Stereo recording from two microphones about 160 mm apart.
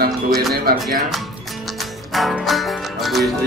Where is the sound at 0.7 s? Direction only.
70° right (ahead or behind).